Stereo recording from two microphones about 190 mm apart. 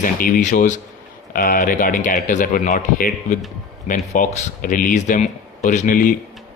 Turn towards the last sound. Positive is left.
turn(degrees=45)  # may be behind; listen again after turning